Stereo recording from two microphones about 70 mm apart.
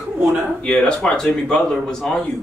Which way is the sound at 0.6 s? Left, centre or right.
Centre.